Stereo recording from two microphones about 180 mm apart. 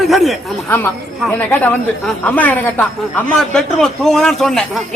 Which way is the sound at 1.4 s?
10° left (ahead or behind).